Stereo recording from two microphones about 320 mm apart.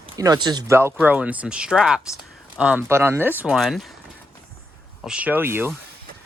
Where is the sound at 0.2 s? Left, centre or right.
Centre.